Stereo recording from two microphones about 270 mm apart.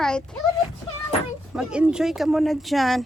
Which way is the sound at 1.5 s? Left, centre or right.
Centre.